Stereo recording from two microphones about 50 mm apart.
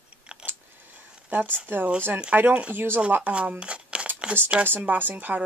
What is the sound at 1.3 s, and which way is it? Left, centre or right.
Speech, right.